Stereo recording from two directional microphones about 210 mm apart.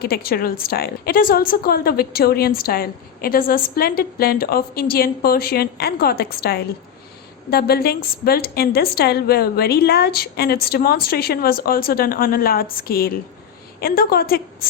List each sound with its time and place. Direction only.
0.0 s a woman's voice: 45° left (ahead or behind)